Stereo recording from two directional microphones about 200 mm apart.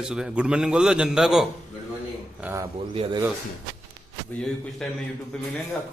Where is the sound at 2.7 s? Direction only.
30° right (ahead or behind).